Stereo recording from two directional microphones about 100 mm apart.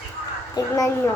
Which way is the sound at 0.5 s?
35° left (ahead or behind).